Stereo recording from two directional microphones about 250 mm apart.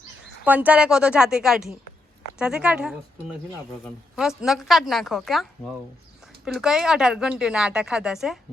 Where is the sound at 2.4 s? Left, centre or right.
Centre.